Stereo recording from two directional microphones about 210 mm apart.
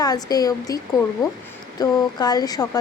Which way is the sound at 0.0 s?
20° left (ahead or behind).